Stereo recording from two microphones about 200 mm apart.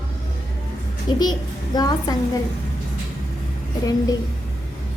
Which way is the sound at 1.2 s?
20° left (ahead or behind).